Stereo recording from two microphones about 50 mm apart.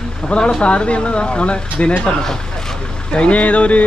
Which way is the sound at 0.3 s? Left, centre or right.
Centre.